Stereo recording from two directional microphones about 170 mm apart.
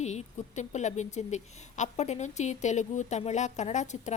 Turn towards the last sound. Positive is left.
turn(degrees=45)  # may be behind; listen again after turning